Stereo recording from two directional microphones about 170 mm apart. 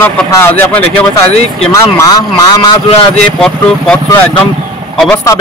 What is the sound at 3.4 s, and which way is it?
Speech, 5° left (ahead or behind).